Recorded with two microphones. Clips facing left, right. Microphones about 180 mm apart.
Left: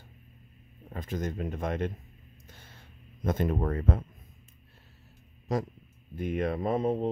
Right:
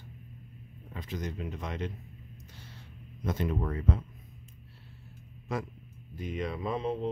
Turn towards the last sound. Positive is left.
turn(degrees=45)  # may be behind; listen again after turning